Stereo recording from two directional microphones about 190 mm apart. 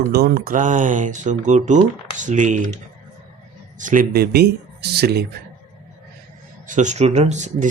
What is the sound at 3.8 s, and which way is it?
Speech, 45° right (ahead or behind).